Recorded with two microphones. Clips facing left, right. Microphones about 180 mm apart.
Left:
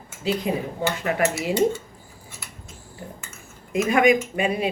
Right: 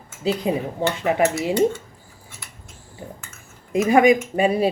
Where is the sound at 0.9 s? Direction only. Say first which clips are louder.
Right 5 dB; 25° right (ahead or behind).